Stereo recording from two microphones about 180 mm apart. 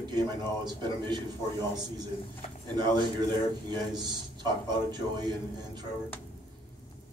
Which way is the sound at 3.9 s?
25° right (ahead or behind).